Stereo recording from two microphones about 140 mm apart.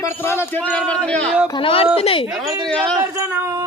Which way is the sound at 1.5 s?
40° left (ahead or behind).